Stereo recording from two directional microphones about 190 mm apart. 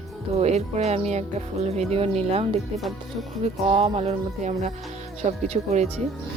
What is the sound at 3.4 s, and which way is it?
A woman's voice, 30° right (ahead or behind).